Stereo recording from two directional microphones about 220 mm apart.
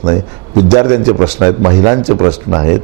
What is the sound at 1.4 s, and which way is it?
A man's voice, 20° right (ahead or behind).